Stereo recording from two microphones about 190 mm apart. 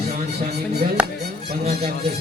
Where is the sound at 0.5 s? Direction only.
55° right (ahead or behind).